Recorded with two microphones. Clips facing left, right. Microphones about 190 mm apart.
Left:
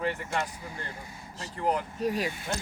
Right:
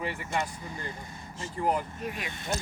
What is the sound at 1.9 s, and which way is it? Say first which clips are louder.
Speech: left 7 dB; 35° left (ahead or behind).